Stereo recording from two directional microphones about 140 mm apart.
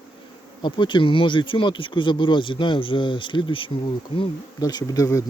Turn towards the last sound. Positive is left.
turn(degrees=25)  # may be behind; listen again after turning